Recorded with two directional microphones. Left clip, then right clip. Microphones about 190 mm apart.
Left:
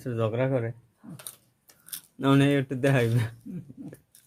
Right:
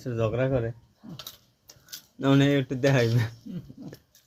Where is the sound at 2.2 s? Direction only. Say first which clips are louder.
Even; 10° left (ahead or behind).